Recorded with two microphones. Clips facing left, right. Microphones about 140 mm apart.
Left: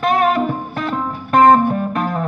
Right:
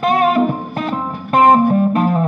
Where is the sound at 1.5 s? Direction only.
30° right (ahead or behind).